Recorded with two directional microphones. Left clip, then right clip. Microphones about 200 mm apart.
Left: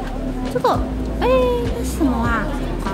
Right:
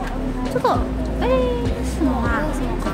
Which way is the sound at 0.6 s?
15° left (ahead or behind).